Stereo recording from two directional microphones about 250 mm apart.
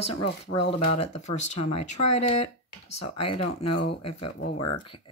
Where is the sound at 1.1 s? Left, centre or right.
Left.